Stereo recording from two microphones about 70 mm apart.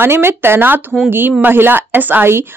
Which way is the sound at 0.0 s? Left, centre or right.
Right.